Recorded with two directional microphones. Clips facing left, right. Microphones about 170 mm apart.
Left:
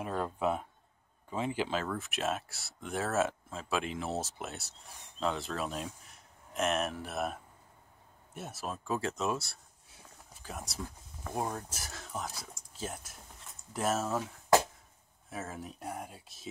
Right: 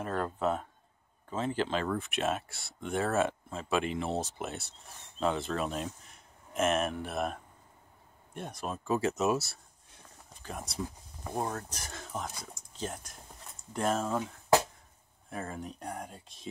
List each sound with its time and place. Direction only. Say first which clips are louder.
0.0 s speech: right 1 dB; 10° left (ahead or behind)
15.2 s speech: right 2 dB; 5° left (ahead or behind)